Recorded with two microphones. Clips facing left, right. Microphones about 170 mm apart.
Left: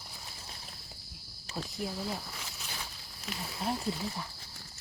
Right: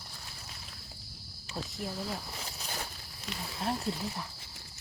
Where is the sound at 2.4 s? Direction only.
35° right (ahead or behind).